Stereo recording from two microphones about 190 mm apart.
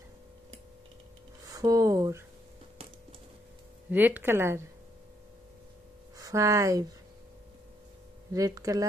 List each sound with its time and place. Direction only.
1.4 s speech: 20° right (ahead or behind)
3.9 s speech: 10° right (ahead or behind)
6.1 s speech: 15° right (ahead or behind)
8.3 s speech: 20° right (ahead or behind)